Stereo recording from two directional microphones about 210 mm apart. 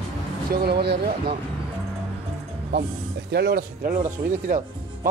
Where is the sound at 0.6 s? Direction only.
50° right (ahead or behind).